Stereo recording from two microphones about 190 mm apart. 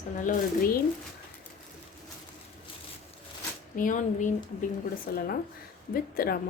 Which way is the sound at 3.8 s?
45° left (ahead or behind).